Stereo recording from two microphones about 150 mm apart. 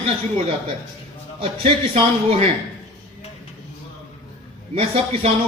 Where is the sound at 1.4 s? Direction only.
40° right (ahead or behind).